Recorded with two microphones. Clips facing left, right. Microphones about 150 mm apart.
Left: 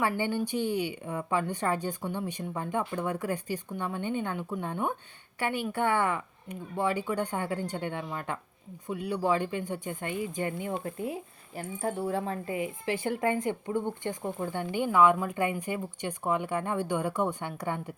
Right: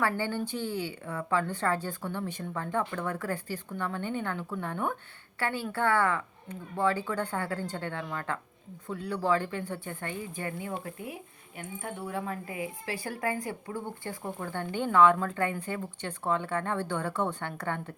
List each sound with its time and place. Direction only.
0.0 s speech: 15° left (ahead or behind)